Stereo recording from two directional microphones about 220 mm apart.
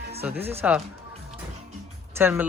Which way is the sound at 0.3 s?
10° right (ahead or behind).